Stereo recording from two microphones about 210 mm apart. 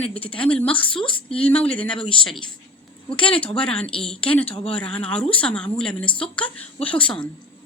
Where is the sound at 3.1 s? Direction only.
25° left (ahead or behind).